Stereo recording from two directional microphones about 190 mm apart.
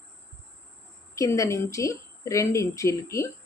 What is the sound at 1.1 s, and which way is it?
A woman's voice, 15° left (ahead or behind).